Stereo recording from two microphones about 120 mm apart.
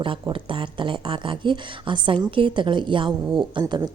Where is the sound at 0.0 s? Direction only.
45° right (ahead or behind).